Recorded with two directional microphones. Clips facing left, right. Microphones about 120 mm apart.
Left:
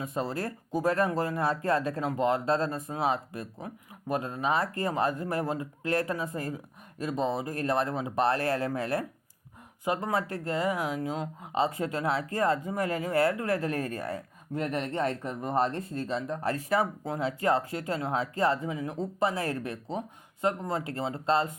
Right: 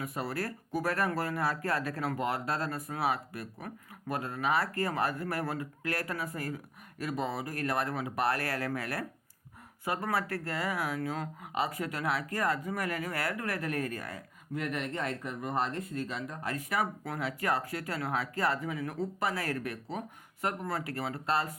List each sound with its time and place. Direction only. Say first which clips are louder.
0.0 s speech: left 3 dB; 25° left (ahead or behind)